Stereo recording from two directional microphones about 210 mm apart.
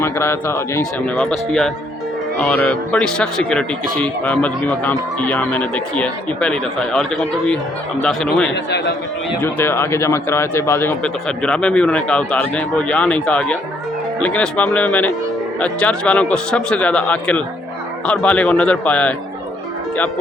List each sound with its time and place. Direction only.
0.0 s speech: 15° left (ahead or behind)
1.1 s speech: centre (ahead or behind)
8.5 s a man's voice: 55° left (ahead or behind)
9.4 s speech: 10° left (ahead or behind)